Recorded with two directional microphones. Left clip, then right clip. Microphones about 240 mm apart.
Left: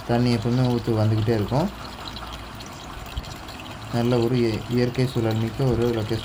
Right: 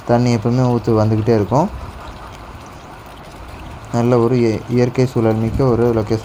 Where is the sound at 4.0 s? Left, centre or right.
Right.